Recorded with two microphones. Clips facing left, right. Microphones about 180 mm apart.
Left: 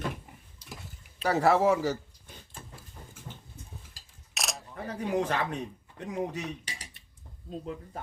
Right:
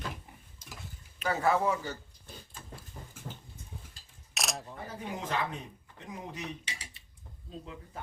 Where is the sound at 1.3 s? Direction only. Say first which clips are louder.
Left 5 dB; 80° left.